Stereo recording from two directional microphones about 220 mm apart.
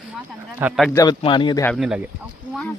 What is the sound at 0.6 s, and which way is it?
Speech, 5° right (ahead or behind).